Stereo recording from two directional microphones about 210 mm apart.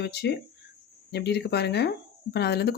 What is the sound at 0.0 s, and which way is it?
Speech, 50° left (ahead or behind).